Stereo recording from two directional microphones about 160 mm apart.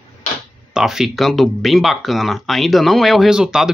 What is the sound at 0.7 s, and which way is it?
Speech, 5° right (ahead or behind).